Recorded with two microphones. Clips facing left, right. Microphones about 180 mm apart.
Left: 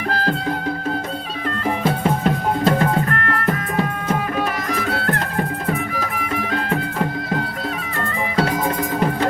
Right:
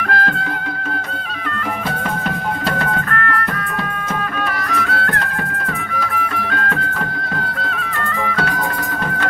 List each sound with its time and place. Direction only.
0.1 s music: 30° left (ahead or behind)
2.7 s music: 25° left (ahead or behind)
4.9 s music: 25° left (ahead or behind)